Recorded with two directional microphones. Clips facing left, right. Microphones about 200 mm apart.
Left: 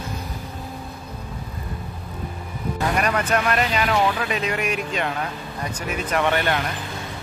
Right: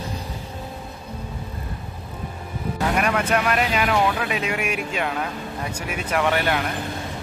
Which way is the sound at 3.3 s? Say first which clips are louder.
Even; 5° right (ahead or behind).